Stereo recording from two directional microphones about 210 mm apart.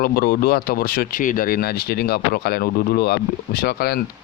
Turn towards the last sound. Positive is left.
turn(degrees=50)  # may be behind; listen again after turning